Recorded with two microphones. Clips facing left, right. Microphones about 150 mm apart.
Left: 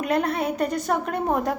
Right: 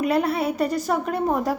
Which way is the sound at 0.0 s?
5° right (ahead or behind).